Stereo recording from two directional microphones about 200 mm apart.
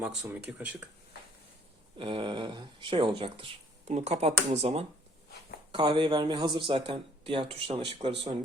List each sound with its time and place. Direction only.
0.0 s speech: 5° right (ahead or behind)
2.0 s speech: 25° right (ahead or behind)